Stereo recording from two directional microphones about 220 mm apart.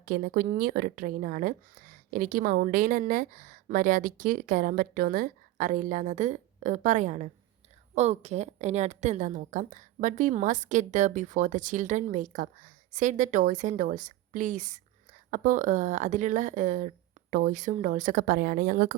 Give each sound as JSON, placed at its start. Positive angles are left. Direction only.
{"t": 0.0, "sound": "speech", "side_deg": -40}